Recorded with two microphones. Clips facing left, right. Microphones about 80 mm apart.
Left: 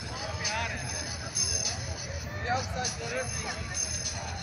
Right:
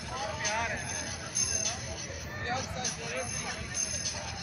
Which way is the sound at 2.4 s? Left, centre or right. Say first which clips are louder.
Left 4 dB; centre.